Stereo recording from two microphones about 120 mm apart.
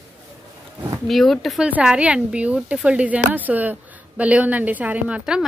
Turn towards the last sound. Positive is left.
turn(degrees=-10)  # may be behind; listen again after turning